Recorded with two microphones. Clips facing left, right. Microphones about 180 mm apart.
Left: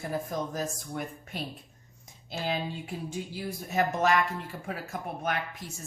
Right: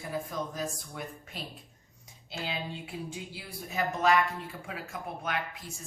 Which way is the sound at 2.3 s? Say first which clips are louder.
Left 5 dB; 45° left (ahead or behind).